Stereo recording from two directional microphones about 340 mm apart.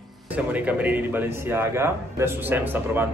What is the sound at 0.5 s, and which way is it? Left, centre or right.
Speech, centre.